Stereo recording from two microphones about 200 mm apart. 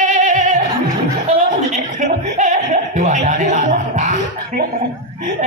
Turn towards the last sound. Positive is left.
turn(degrees=-40)  # may be behind; listen again after turning